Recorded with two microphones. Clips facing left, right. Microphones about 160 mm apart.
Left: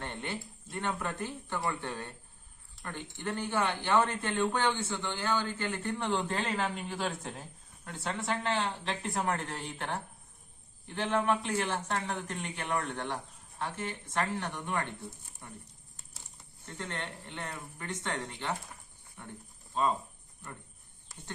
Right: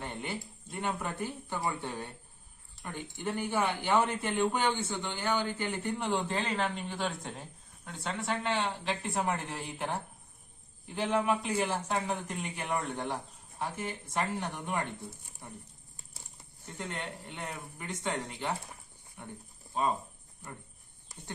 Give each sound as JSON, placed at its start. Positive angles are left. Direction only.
{"t": 0.0, "sound": "speech", "side_deg": -10}
{"t": 16.7, "sound": "speech", "side_deg": -10}